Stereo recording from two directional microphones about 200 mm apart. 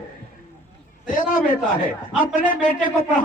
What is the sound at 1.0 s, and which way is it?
Speech, 40° left (ahead or behind).